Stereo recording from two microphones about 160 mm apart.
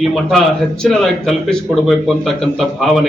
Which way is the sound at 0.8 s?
Centre (ahead or behind).